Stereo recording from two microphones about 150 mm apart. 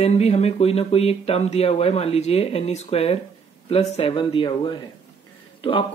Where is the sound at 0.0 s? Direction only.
45° left (ahead or behind).